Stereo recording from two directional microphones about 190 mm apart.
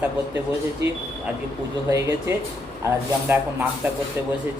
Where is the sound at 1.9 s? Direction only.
15° right (ahead or behind).